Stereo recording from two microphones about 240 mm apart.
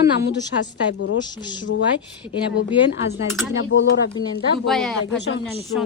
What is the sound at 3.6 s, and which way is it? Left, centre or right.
Speech, left.